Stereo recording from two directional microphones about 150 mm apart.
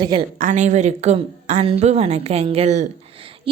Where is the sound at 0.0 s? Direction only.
30° right (ahead or behind).